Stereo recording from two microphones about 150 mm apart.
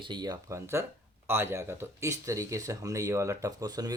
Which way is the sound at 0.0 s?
30° right (ahead or behind).